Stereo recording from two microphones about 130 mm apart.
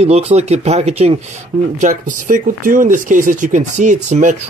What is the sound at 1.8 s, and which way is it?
Speech, 85° right.